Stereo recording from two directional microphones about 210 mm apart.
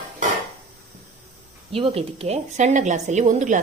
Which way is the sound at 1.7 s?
25° right (ahead or behind).